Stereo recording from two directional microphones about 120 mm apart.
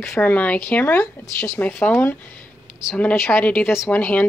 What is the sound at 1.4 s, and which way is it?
Speech, 5° left (ahead or behind).